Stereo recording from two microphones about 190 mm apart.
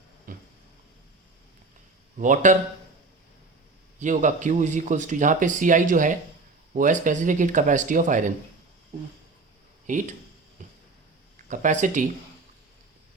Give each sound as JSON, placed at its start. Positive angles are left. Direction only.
{"t": 0.3, "sound": "a sound", "side_deg": -45}
{"t": 2.1, "sound": "a man's voice", "side_deg": -40}
{"t": 4.0, "sound": "speech", "side_deg": -40}
{"t": 9.8, "sound": "speech", "side_deg": -40}
{"t": 11.4, "sound": "speech", "side_deg": -40}